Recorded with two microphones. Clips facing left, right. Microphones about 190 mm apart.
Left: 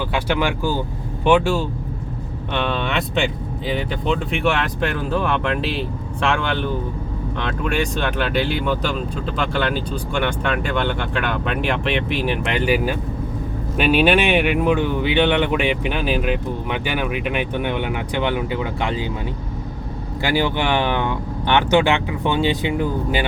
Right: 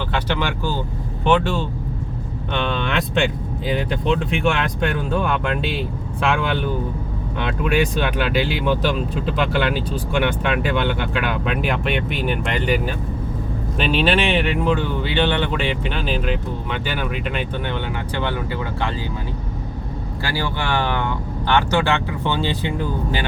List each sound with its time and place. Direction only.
0.1 s speech: 10° left (ahead or behind)
20.2 s speech: 20° left (ahead or behind)